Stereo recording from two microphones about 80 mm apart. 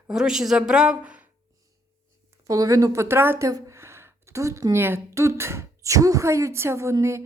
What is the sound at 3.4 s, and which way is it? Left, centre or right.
Speech, right.